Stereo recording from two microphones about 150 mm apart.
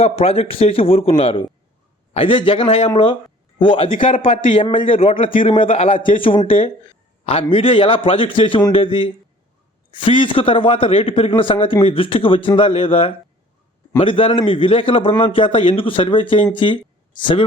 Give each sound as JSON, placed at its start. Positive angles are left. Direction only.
{"t": 0.0, "sound": "a man's voice", "side_deg": 40}